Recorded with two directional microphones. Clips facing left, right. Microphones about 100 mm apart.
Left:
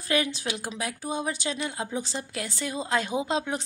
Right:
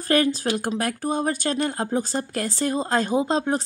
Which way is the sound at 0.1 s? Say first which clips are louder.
Right 7 dB; 40° right (ahead or behind).